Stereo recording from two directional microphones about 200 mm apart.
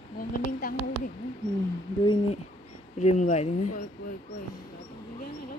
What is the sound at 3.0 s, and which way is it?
Speech, 35° left (ahead or behind).